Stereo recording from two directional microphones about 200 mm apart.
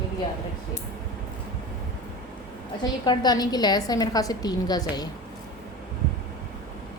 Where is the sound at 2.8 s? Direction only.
20° left (ahead or behind).